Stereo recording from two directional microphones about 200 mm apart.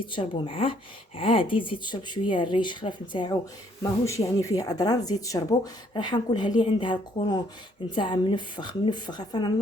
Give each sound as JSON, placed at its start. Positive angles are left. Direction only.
{"t": 0.1, "sound": "speech", "side_deg": 25}
{"t": 4.4, "sound": "speech", "side_deg": 15}